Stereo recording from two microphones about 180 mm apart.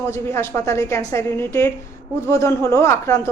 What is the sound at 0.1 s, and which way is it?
A woman's voice, 15° left (ahead or behind).